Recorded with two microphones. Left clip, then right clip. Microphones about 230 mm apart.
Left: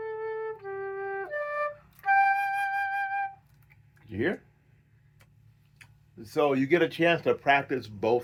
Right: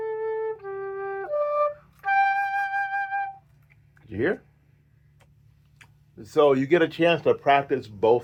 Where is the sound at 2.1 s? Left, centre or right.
Right.